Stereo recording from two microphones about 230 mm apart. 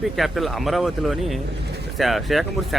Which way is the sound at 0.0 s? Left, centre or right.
Centre.